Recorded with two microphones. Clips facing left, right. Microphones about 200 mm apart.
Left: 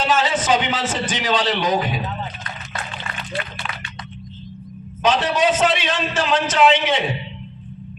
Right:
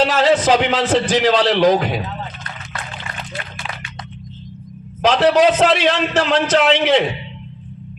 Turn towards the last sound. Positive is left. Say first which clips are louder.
# right 3 dB
turn(degrees=-65)  # may be behind; listen again after turning